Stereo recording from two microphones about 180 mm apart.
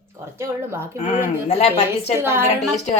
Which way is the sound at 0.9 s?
40° left (ahead or behind).